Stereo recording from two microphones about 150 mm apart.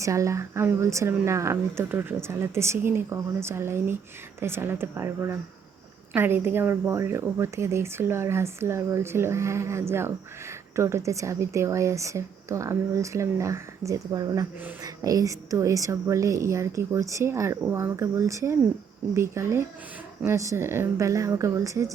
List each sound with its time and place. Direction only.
0.0 s a woman's voice: 20° right (ahead or behind)